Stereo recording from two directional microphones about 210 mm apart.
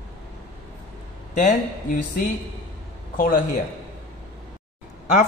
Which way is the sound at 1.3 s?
35° left (ahead or behind).